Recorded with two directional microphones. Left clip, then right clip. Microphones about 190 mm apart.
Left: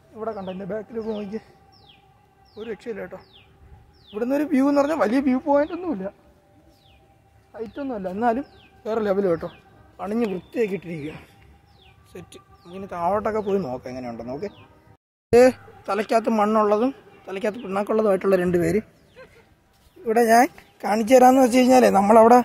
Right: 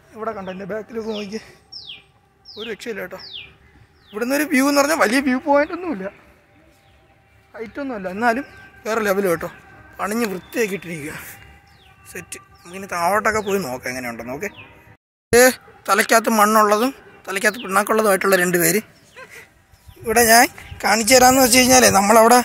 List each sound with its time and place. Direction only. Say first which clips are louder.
0.1 s speech: right 3 dB; 10° right (ahead or behind)
7.5 s speech: right 2 dB; 15° right (ahead or behind)
9.9 s speech: right 3 dB; centre (ahead or behind)
19.2 s a sound: right 6 dB; 30° left (ahead or behind)
20.1 s speech: right 3 dB; 10° left (ahead or behind)